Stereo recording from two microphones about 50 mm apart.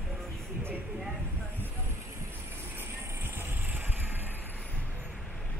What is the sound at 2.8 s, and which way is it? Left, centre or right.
Vehicle, right.